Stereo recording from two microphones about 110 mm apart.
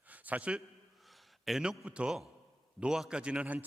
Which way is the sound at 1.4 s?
Centre (ahead or behind).